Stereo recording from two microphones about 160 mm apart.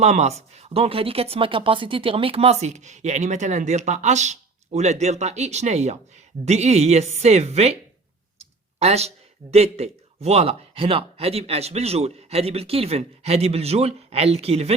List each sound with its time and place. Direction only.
0.0 s speech: 45° right (ahead or behind)
8.8 s speech: 40° right (ahead or behind)